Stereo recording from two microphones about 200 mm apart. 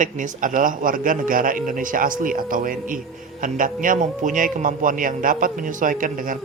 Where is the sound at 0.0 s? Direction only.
40° right (ahead or behind).